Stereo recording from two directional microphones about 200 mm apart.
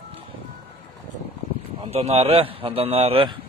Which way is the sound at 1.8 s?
30° right (ahead or behind).